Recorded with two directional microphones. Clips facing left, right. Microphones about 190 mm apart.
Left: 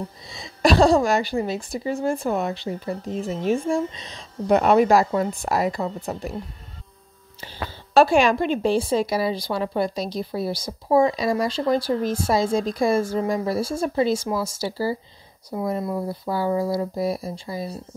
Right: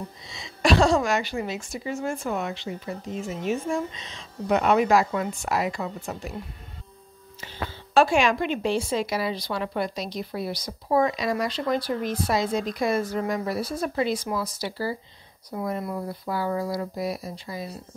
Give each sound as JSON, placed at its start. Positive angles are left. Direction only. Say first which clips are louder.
{"t": 0.3, "sound": "speech", "louder": "left 3 dB", "side_deg": 35}
{"t": 7.3, "sound": "speech", "louder": "left 1 dB", "side_deg": 35}